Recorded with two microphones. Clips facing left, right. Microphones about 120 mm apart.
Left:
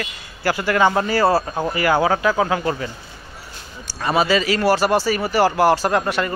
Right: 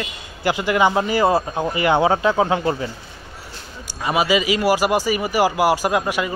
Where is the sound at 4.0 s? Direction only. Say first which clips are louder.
Left 1 dB; 15° right (ahead or behind).